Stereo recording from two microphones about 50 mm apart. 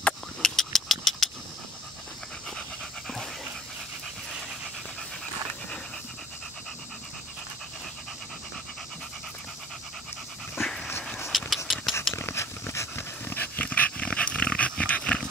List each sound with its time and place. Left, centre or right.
0.4 s a sound: centre
10.5 s dog: centre
11.1 s dog: centre
11.5 s a sound: centre
12.1 s dog: left
13.6 s dog: left